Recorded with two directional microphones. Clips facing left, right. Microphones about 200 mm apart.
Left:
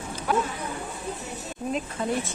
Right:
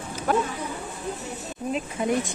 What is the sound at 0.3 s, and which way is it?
Speech, 45° right (ahead or behind).